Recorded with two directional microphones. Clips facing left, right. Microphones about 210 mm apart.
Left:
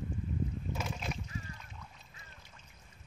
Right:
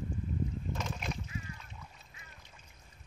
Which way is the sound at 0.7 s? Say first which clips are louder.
Even; 5° left (ahead or behind).